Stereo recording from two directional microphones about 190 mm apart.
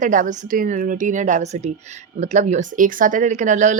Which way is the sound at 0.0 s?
40° right (ahead or behind).